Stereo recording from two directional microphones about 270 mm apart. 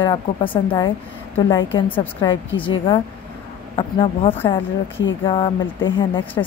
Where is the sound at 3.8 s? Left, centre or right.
Centre.